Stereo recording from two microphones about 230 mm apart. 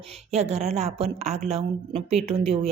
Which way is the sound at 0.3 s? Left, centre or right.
Right.